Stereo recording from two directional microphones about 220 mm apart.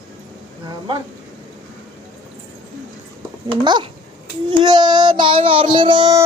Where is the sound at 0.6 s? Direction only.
20° right (ahead or behind).